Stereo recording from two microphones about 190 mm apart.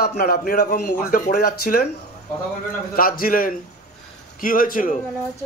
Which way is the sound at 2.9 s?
50° left (ahead or behind).